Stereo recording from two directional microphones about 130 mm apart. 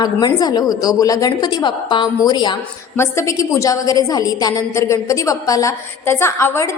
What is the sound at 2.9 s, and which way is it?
A woman's voice, 20° left (ahead or behind).